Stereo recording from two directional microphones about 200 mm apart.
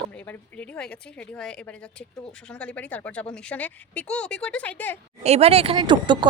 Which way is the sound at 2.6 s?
10° left (ahead or behind).